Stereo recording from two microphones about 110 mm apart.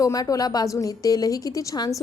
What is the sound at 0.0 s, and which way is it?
A woman's voice, 30° left (ahead or behind).